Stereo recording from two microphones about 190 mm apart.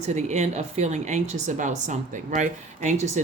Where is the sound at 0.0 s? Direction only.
35° right (ahead or behind).